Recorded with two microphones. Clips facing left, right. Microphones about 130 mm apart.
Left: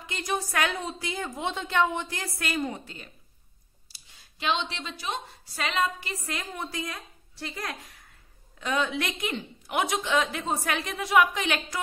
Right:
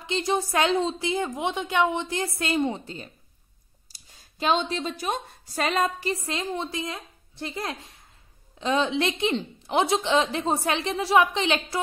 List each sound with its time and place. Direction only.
0.0 s a woman's voice: 25° right (ahead or behind)
3.9 s a woman's voice: 45° right (ahead or behind)
6.2 s a woman's voice: 25° right (ahead or behind)